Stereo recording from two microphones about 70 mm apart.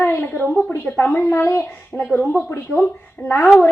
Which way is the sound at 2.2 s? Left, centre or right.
Left.